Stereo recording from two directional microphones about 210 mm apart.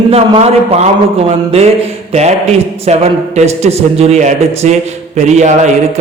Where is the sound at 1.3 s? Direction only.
30° right (ahead or behind).